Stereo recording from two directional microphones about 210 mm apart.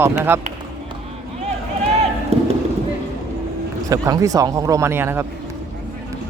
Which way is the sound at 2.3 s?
30° right (ahead or behind).